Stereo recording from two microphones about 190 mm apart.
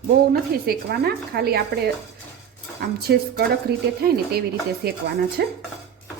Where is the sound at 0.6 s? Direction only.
55° right (ahead or behind).